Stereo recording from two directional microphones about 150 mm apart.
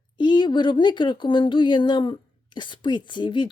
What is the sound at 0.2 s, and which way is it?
Speech, 30° left (ahead or behind).